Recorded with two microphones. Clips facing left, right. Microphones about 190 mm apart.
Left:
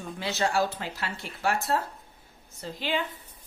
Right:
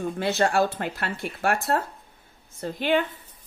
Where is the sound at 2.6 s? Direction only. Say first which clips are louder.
Right 7 dB; 55° right (ahead or behind).